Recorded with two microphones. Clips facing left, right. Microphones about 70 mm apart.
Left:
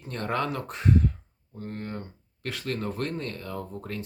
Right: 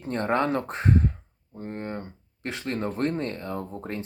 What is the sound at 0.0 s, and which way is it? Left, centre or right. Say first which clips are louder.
Speech: right 5 dB; right.